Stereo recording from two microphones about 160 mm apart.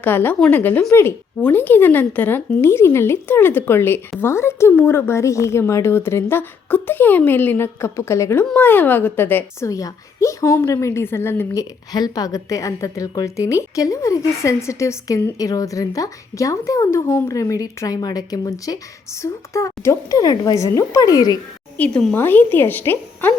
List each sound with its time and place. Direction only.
0.0 s a woman's voice: 10° left (ahead or behind)
21.8 s a woman's voice: 10° left (ahead or behind)